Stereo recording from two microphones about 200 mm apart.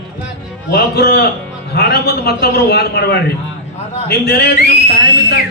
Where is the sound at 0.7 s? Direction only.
50° left (ahead or behind).